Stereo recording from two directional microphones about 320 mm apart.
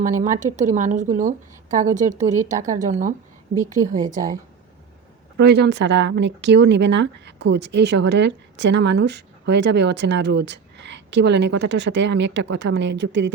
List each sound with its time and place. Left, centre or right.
0.0 s a woman's voice: right
3.5 s a woman's voice: centre
5.4 s speech: right